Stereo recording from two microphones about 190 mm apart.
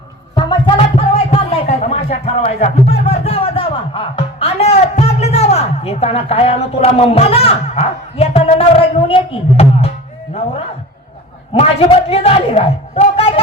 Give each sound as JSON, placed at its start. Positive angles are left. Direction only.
{"t": 0.3, "sound": "music", "side_deg": 25}
{"t": 11.5, "sound": "a man's voice", "side_deg": 30}